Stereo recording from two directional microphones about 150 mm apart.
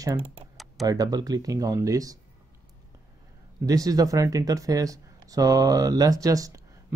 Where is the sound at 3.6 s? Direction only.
25° right (ahead or behind).